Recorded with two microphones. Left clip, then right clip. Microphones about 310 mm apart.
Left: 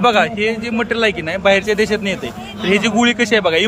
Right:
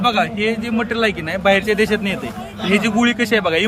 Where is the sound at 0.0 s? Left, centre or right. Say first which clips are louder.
Left 3 dB; centre.